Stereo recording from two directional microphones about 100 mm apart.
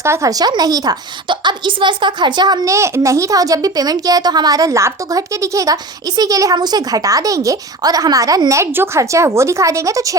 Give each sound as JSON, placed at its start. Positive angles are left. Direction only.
{"t": 0.0, "sound": "a child's voice", "side_deg": -30}
{"t": 1.3, "sound": "a woman's voice", "side_deg": -55}
{"t": 2.6, "sound": "a child's voice", "side_deg": -30}